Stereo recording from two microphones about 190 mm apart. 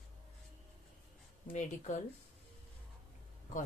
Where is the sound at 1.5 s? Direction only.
40° left (ahead or behind).